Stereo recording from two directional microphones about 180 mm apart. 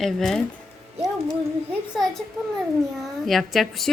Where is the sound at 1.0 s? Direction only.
15° right (ahead or behind).